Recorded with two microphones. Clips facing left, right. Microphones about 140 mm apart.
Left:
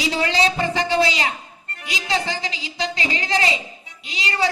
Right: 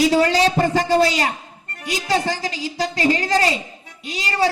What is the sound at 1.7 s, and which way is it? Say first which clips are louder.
A woman's voice: right 4 dB; 45° right (ahead or behind).